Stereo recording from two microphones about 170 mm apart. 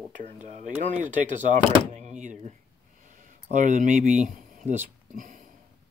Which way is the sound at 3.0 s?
50° right (ahead or behind).